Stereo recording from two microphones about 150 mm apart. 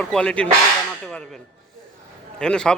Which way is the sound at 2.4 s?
5° left (ahead or behind).